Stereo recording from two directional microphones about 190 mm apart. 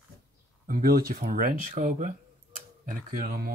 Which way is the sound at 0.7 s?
50° right (ahead or behind).